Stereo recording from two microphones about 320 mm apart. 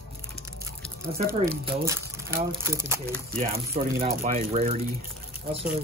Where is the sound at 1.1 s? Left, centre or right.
Right.